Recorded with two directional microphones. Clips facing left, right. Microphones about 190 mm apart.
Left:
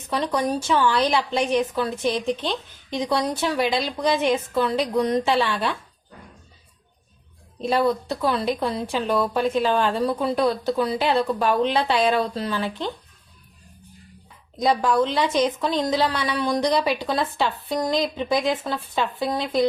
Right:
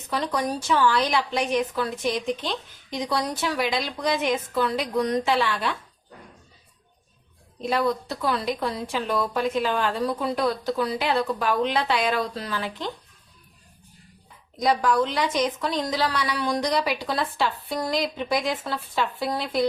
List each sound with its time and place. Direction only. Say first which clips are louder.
0.1 s speech: left 3 dB; 25° left (ahead or behind)
7.6 s speech: left 3 dB; 30° left (ahead or behind)
14.6 s speech: left 2 dB; 25° left (ahead or behind)